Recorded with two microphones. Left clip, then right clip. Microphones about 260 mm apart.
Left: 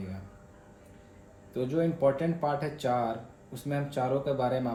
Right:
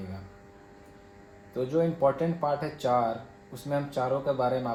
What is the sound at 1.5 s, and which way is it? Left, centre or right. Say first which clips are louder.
Speech: right 2 dB; centre.